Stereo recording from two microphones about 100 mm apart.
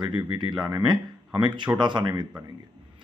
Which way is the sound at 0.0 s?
50° right (ahead or behind).